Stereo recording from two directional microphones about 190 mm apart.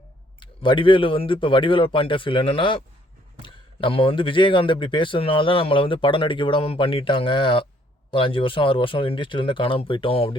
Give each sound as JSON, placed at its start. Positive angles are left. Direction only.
{"t": 0.3, "sound": "a man's voice", "side_deg": 25}